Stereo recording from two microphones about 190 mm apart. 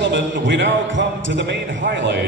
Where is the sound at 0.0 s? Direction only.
75° right (ahead or behind).